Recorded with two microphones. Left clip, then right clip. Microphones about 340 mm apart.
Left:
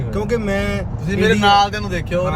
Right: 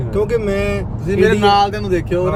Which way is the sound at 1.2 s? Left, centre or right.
Right.